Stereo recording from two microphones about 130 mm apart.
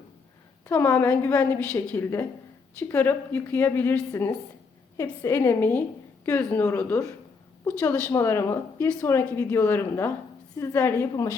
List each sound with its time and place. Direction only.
0.7 s a woman's voice: 15° left (ahead or behind)